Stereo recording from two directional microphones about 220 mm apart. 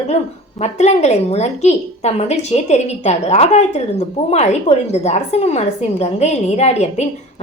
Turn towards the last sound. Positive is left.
turn(degrees=30)  # may be behind; listen again after turning